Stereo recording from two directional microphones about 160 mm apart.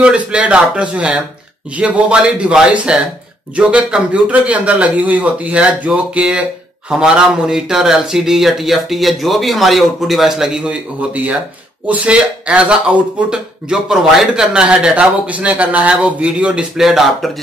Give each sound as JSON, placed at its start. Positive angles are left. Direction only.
{"t": 0.0, "sound": "speech", "side_deg": -5}